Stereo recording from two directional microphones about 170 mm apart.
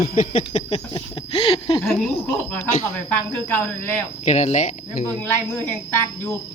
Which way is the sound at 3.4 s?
10° left (ahead or behind).